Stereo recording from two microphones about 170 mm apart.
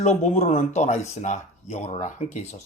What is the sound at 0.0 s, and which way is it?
Speech, 45° left (ahead or behind).